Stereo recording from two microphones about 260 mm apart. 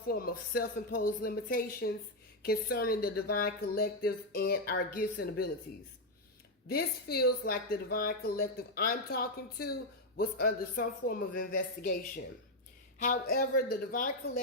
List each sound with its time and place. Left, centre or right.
0.1 s a woman's voice: left
6.7 s a woman's voice: left